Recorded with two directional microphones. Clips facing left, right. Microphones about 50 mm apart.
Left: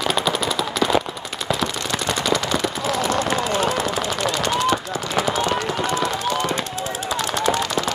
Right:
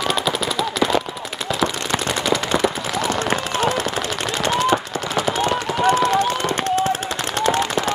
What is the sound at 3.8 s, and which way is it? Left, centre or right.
Machine gun, right.